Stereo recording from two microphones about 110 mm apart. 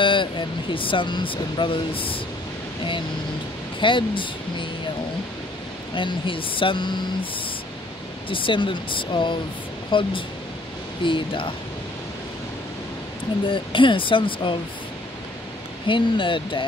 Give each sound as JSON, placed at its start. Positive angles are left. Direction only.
{"t": 0.0, "sound": "speech", "side_deg": 50}
{"t": 3.8, "sound": "speech", "side_deg": 50}
{"t": 5.9, "sound": "speech", "side_deg": 50}
{"t": 8.3, "sound": "speech", "side_deg": 50}
{"t": 13.5, "sound": "speech", "side_deg": 50}
{"t": 15.9, "sound": "speech", "side_deg": 50}